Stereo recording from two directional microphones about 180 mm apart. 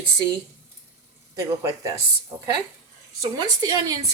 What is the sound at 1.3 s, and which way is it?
Speech, 15° right (ahead or behind).